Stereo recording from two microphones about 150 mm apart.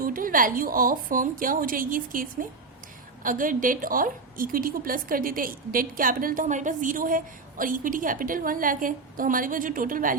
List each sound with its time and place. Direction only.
0.0 s a woman's voice: 70° right (ahead or behind)